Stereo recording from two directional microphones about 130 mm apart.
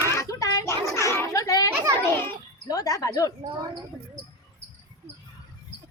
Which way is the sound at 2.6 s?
30° left (ahead or behind).